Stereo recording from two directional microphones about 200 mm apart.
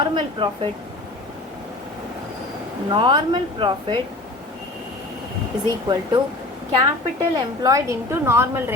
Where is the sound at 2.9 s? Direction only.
25° right (ahead or behind).